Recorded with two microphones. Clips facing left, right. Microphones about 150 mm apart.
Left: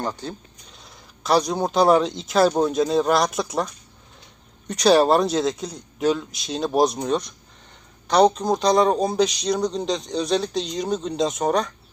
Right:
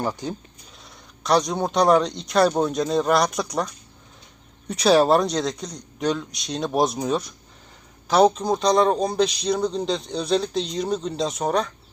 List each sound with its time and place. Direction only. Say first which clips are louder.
0.0 s speech: right 2 dB; 10° right (ahead or behind)
0.9 s speech: even; centre (ahead or behind)
4.7 s speech: left 1 dB; centre (ahead or behind)